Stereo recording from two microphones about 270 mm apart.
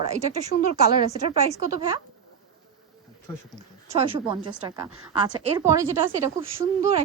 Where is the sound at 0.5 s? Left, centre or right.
Left.